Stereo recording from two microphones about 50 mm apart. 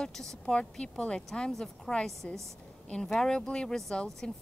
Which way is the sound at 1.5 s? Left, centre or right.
Centre.